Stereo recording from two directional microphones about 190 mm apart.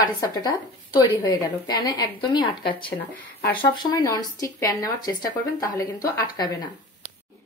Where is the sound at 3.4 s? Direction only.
50° left (ahead or behind).